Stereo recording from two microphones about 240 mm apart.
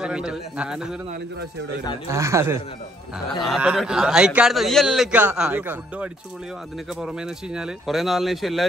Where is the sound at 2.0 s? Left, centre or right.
Centre.